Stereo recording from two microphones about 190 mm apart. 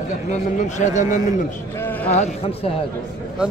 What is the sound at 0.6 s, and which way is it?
Speech, 40° left (ahead or behind).